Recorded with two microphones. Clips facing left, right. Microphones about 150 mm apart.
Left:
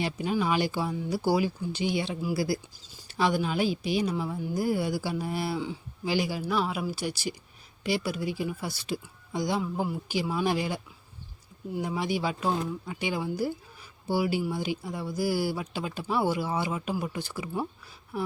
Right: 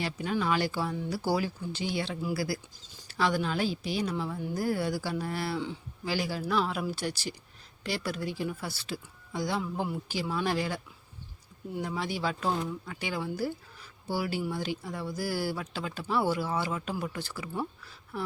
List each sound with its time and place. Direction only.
0.0 s speech: 15° left (ahead or behind)